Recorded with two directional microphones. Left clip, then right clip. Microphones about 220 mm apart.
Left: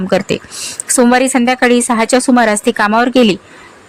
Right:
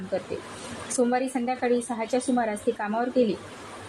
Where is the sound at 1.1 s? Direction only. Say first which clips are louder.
Left 15 dB; 45° left (ahead or behind).